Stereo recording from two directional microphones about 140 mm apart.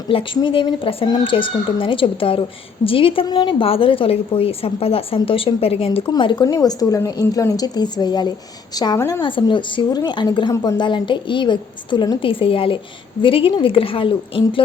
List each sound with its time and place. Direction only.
0.1 s a woman's voice: 40° left (ahead or behind)
6.1 s a woman's voice: 35° left (ahead or behind)
9.2 s a woman's voice: 35° left (ahead or behind)